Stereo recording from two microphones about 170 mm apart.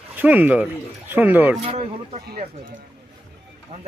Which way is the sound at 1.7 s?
40° right (ahead or behind).